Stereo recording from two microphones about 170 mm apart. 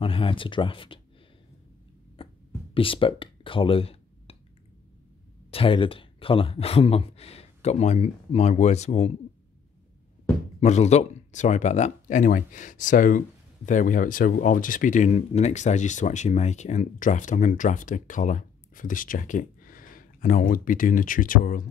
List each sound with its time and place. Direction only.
0.0 s speech: 30° left (ahead or behind)
2.2 s a sound: 30° left (ahead or behind)
2.7 s speech: 30° left (ahead or behind)
5.5 s speech: 30° left (ahead or behind)
10.6 s speech: 40° left (ahead or behind)